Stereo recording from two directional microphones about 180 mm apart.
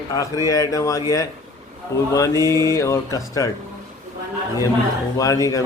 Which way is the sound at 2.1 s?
20° left (ahead or behind).